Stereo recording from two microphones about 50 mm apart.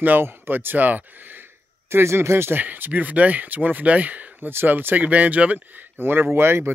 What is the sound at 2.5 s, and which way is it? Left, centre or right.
Speech, right.